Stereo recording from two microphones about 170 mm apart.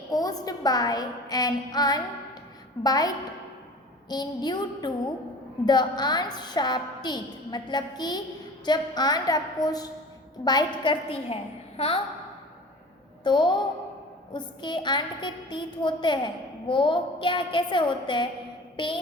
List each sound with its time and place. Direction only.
0.1 s a woman's voice: 20° left (ahead or behind)
4.1 s a woman's voice: 25° left (ahead or behind)
13.2 s a woman's voice: 25° left (ahead or behind)